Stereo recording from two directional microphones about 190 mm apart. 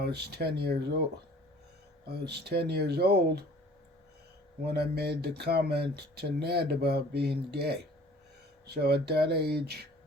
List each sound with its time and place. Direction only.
0.0 s speech: 60° right (ahead or behind)
2.0 s speech: 60° right (ahead or behind)
4.6 s speech: 55° right (ahead or behind)